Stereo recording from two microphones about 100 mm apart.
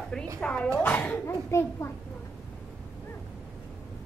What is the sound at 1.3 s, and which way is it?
Speech, 25° left (ahead or behind).